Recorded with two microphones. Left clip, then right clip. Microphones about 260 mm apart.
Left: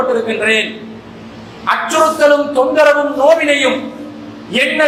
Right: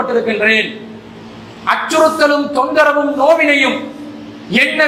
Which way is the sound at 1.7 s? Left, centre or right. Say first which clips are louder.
Even; right.